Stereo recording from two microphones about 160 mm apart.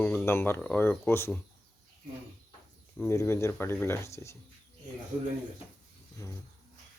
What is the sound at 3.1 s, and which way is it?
Speech, 15° left (ahead or behind).